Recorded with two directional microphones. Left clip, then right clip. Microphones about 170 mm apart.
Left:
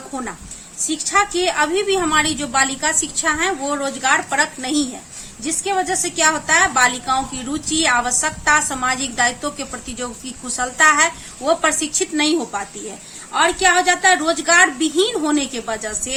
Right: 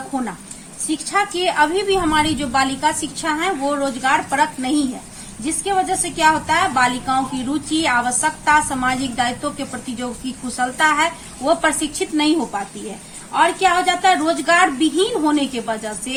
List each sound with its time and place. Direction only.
1.1 s a woman's voice: 35° left (ahead or behind)